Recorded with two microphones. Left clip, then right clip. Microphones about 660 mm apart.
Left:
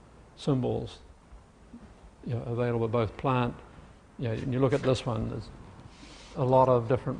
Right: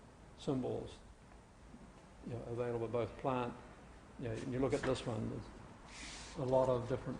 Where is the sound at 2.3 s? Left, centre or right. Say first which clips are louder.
Left 9 dB; left.